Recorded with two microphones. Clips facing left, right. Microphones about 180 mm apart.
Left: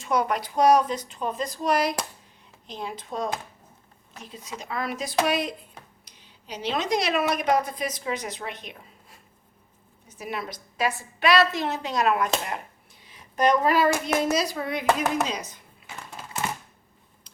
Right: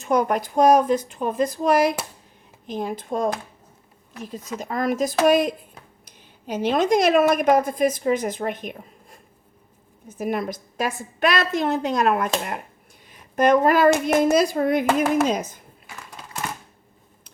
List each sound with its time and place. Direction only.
0.0 s a woman's voice: 50° right (ahead or behind)
4.6 s a woman's voice: 45° right (ahead or behind)